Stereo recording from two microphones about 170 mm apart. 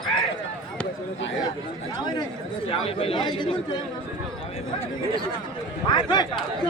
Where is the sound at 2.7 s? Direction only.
35° left (ahead or behind).